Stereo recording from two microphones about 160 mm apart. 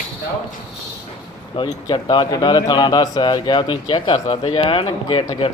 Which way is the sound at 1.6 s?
30° left (ahead or behind).